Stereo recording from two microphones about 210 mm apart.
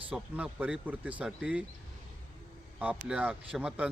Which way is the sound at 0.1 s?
5° right (ahead or behind).